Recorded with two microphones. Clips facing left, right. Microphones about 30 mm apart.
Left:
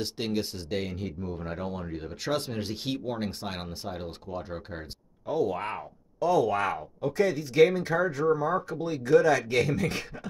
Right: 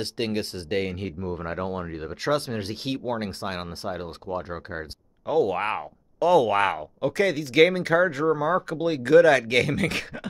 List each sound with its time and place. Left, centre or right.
0.0 s speech: right
1.3 s speech: right
5.2 s speech: right
5.6 s speech: right
6.1 s speech: right